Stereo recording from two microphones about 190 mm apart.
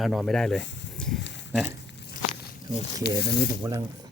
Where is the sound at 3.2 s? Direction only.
60° left (ahead or behind).